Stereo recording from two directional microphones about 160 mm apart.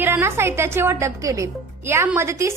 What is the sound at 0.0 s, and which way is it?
A woman's voice, 15° right (ahead or behind).